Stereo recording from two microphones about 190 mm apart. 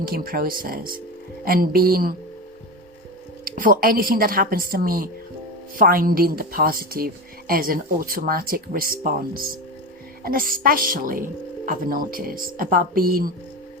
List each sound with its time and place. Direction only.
0.0 s speech: 50° right (ahead or behind)
3.4 s speech: 50° right (ahead or behind)